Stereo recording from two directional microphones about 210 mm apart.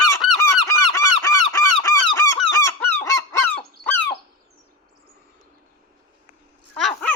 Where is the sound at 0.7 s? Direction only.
15° left (ahead or behind).